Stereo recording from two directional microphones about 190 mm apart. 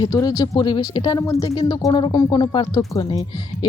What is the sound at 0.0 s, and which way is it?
Speech, 20° left (ahead or behind).